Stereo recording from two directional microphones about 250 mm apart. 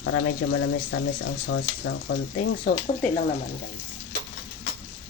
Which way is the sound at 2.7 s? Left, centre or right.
Left.